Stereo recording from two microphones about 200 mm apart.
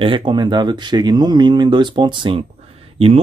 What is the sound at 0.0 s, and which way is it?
Speech, 25° right (ahead or behind).